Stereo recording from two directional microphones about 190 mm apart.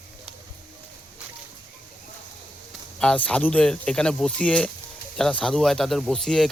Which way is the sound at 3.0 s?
5° left (ahead or behind).